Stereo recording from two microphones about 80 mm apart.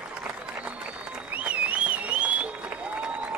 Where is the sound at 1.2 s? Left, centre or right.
Centre.